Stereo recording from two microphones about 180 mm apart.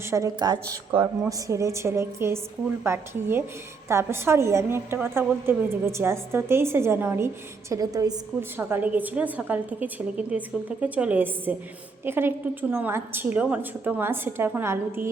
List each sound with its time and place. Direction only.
0.1 s a woman's voice: 20° right (ahead or behind)